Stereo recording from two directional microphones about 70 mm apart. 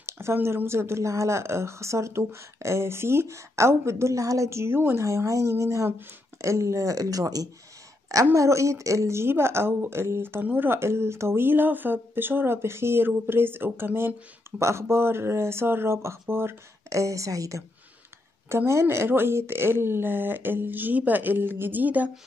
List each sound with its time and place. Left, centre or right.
0.0 s speech: right
5.0 s speech: right
8.4 s speech: right
16.9 s speech: right
18.7 s speech: right